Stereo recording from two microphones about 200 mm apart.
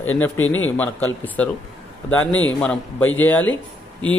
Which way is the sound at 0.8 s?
10° left (ahead or behind).